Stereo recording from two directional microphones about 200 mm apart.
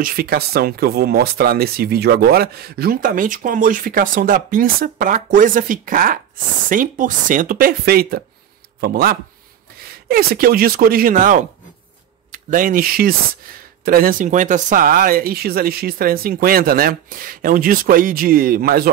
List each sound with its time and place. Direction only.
0.0 s speech: 45° right (ahead or behind)